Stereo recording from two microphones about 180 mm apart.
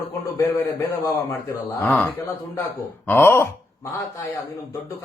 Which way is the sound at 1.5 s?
15° left (ahead or behind).